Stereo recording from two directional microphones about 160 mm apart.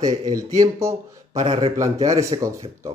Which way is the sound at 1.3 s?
40° right (ahead or behind).